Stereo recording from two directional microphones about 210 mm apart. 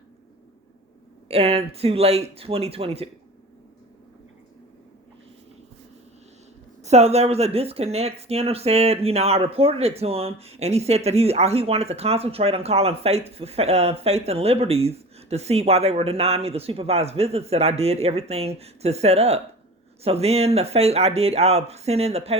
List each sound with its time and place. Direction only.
1.3 s speech: 30° right (ahead or behind)
6.8 s speech: 30° right (ahead or behind)